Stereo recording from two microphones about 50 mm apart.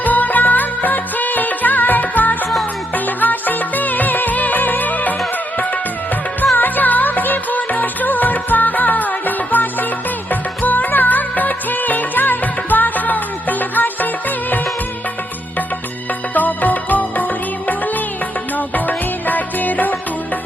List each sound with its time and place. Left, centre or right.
0.0 s music: left
6.6 s music: left
10.6 s music of bollywood: left
16.3 s music: left